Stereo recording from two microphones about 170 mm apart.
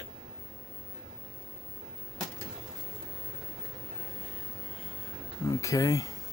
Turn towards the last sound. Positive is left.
turn(degrees=20)  # may be behind; listen again after turning